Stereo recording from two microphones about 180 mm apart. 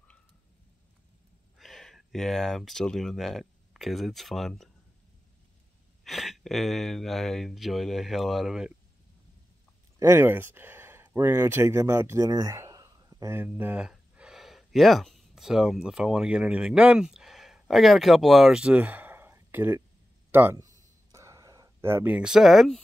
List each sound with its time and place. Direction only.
1.6 s speech: centre (ahead or behind)
6.0 s speech: centre (ahead or behind)
9.9 s speech: 15° right (ahead or behind)
21.1 s a sound: 15° right (ahead or behind); by 22.8 s centre (ahead or behind)